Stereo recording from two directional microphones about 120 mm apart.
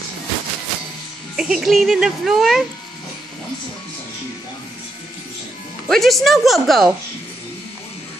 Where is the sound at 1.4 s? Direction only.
5° right (ahead or behind).